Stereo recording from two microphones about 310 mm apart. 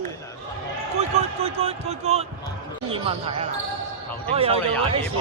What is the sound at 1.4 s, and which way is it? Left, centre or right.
Basketball bounce, centre.